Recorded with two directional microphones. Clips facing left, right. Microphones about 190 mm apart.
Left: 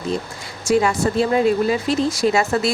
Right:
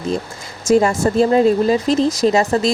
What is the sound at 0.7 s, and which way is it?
Speech, 45° right (ahead or behind).